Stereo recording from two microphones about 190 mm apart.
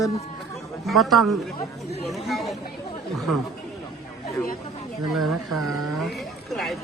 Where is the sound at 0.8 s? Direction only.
Centre (ahead or behind).